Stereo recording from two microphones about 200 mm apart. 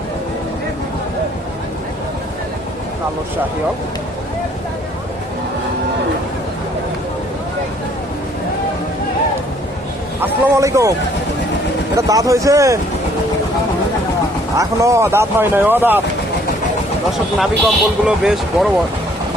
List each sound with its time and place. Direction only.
10.2 s speech: 15° right (ahead or behind)
11.9 s speech: 15° right (ahead or behind)
14.5 s speech: 15° right (ahead or behind)
17.4 s speech: centre (ahead or behind)